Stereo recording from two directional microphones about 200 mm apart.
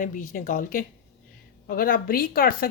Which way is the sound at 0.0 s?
40° left (ahead or behind).